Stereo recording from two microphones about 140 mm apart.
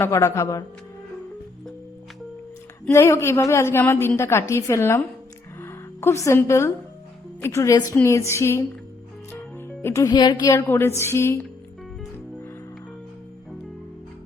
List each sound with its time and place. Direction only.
0.0 s a woman's voice: 20° left (ahead or behind)
2.9 s a woman's voice: 20° left (ahead or behind)
10.7 s a woman's voice: 15° left (ahead or behind)